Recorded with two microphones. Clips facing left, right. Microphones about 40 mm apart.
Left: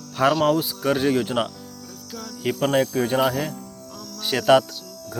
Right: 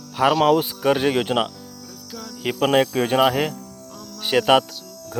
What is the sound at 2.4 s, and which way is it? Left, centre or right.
Speech, right.